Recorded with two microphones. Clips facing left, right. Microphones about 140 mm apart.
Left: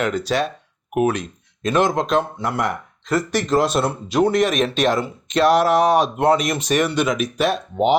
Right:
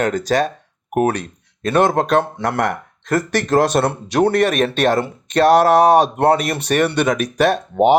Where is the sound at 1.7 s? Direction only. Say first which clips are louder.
Right 3 dB; 60° right (ahead or behind).